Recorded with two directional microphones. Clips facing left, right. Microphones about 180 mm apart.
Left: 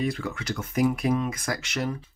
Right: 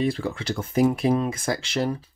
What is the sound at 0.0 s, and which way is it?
Speech, 30° right (ahead or behind).